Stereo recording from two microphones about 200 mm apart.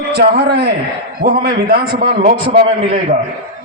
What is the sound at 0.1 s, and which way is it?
A man's voice, 55° right (ahead or behind).